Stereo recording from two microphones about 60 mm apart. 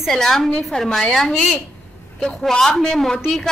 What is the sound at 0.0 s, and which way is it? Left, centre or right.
A woman's voice, centre.